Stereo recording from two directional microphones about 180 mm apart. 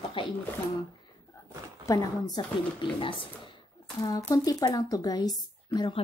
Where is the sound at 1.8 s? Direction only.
20° left (ahead or behind).